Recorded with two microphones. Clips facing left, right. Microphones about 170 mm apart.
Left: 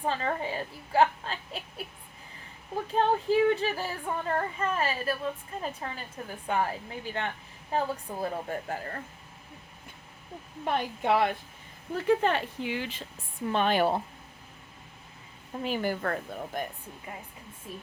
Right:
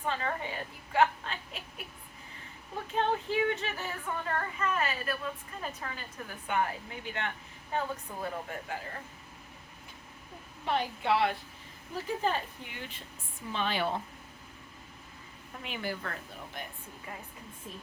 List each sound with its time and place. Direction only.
0.0 s a woman's voice: 35° left (ahead or behind)
2.9 s speech: 35° left (ahead or behind)
10.7 s speech: 50° left (ahead or behind)
12.0 s speech: 70° left (ahead or behind); by 13.1 s 90° left
13.5 s speech: 55° left (ahead or behind)
15.5 s speech: 40° left (ahead or behind)